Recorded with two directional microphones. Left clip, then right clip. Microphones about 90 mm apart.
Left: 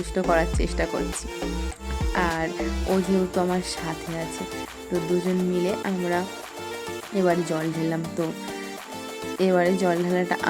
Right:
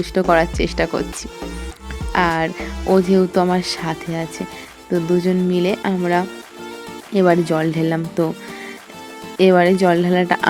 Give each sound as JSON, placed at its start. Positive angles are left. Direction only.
{"t": 0.0, "sound": "speech", "side_deg": -40}
{"t": 2.1, "sound": "speech", "side_deg": -45}
{"t": 9.4, "sound": "speech", "side_deg": -50}